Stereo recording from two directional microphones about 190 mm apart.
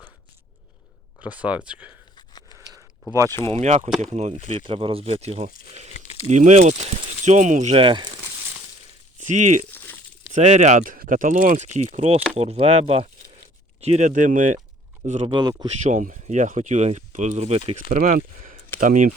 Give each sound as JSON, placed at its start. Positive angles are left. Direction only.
{"t": 1.2, "sound": "speech", "side_deg": -5}
{"t": 2.1, "sound": "biting", "side_deg": 20}
{"t": 2.6, "sound": "a sound", "side_deg": -15}
{"t": 3.4, "sound": "speech", "side_deg": -35}
{"t": 3.8, "sound": "speech", "side_deg": 0}
{"t": 4.1, "sound": "speech", "side_deg": -35}
{"t": 5.9, "sound": "crumpling", "side_deg": 35}
{"t": 6.2, "sound": "speech", "side_deg": -35}
{"t": 9.2, "sound": "speech", "side_deg": -40}
{"t": 15.3, "sound": "speech", "side_deg": -20}
{"t": 15.8, "sound": "speech", "side_deg": -40}